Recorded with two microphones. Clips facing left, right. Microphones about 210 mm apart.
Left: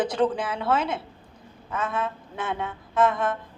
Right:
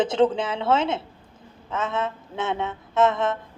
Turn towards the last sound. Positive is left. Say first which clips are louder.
# right 2 dB
turn(degrees=-25)  # may be behind; listen again after turning